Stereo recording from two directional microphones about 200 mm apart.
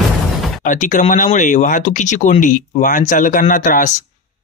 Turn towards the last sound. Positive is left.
turn(degrees=40)  # may be behind; listen again after turning